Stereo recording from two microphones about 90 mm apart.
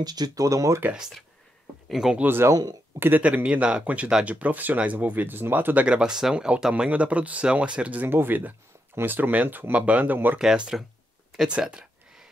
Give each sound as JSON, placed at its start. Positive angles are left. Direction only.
{"t": 0.0, "sound": "speech", "side_deg": -50}
{"t": 0.9, "sound": "speech", "side_deg": -5}
{"t": 2.1, "sound": "speech", "side_deg": -25}
{"t": 2.5, "sound": "speech", "side_deg": -45}
{"t": 3.0, "sound": "speech", "side_deg": -20}
{"t": 5.9, "sound": "speech", "side_deg": -10}
{"t": 10.4, "sound": "speech", "side_deg": -5}
{"t": 11.3, "sound": "a sound", "side_deg": -10}